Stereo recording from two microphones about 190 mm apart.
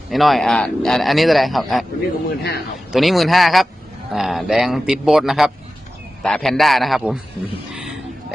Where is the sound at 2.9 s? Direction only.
Centre (ahead or behind).